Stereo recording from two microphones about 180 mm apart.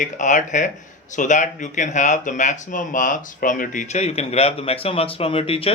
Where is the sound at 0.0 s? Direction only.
45° left (ahead or behind).